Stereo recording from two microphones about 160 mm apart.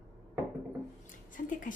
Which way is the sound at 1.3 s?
55° left (ahead or behind).